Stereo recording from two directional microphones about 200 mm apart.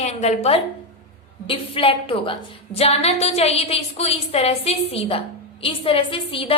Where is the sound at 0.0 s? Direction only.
35° left (ahead or behind).